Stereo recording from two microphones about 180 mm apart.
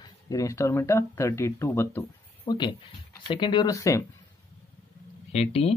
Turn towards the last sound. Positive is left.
turn(degrees=35)  # may be behind; listen again after turning